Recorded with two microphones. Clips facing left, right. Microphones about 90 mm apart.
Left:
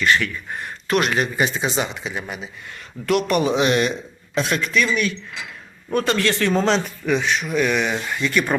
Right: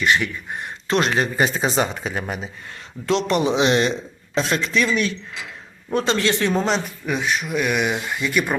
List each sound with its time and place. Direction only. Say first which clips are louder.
0.0 s speech: even; 20° right (ahead or behind); by 2.5 s 40° right (ahead or behind)
3.1 s speech: left 1 dB; 25° right (ahead or behind)
6.7 s speech: left 3 dB; 5° right (ahead or behind)